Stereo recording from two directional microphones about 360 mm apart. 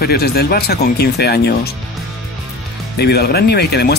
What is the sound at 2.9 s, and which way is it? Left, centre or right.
Speech, left.